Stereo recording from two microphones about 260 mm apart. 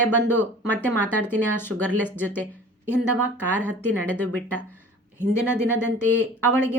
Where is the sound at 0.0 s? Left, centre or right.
Centre.